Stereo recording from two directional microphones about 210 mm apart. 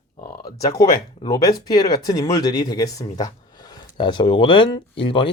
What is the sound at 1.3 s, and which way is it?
Speech, 20° left (ahead or behind).